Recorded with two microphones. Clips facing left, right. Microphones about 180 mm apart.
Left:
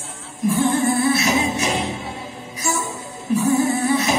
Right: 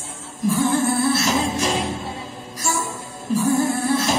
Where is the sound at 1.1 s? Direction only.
65° left (ahead or behind).